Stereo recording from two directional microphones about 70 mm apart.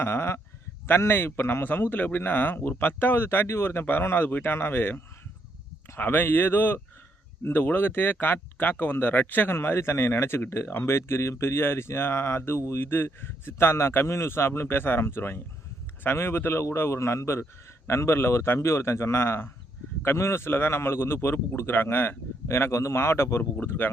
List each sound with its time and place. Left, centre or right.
0.0 s a man's voice: left